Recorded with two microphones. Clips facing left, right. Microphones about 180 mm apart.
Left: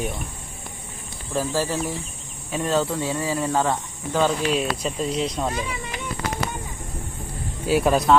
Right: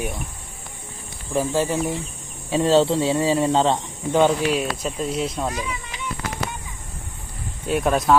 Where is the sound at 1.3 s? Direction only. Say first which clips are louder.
Right 3 dB; 20° right (ahead or behind).